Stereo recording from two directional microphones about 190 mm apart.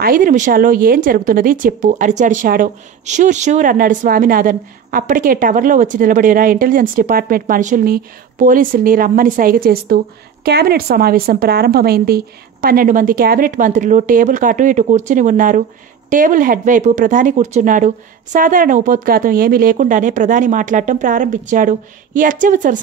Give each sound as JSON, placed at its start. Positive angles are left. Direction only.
{"t": 0.0, "sound": "speech", "side_deg": -45}